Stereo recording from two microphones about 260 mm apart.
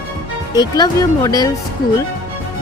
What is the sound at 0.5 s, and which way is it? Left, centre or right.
Speech, centre.